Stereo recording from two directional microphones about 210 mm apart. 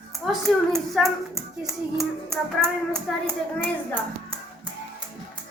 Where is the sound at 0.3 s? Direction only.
Centre (ahead or behind).